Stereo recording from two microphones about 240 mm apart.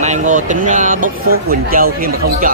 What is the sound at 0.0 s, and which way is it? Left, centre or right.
Speech, right.